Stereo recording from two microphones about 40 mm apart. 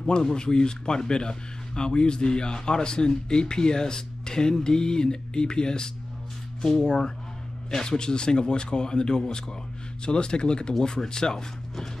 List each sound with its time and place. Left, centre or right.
0.1 s speech: centre